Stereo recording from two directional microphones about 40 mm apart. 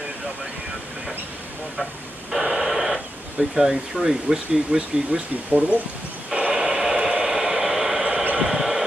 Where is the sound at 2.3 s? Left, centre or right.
Centre.